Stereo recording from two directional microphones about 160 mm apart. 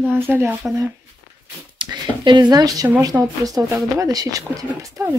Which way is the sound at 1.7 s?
30° right (ahead or behind).